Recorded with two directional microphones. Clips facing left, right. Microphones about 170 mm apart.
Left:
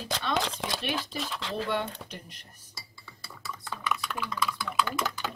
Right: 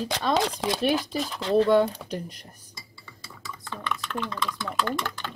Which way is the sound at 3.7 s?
5° left (ahead or behind).